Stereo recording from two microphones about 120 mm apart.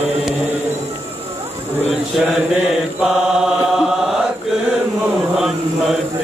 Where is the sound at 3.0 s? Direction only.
5° right (ahead or behind).